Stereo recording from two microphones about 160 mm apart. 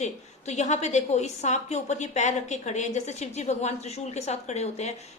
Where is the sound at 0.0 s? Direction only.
45° left (ahead or behind).